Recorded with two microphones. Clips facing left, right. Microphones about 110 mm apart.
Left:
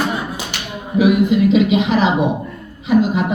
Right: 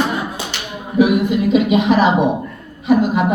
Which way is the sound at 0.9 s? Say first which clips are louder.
Left 1 dB; 50° right (ahead or behind).